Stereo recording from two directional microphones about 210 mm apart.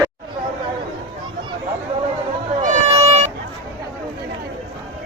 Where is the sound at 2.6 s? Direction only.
35° right (ahead or behind).